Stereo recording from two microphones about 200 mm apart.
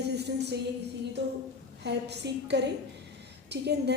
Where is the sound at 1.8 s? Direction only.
60° right (ahead or behind).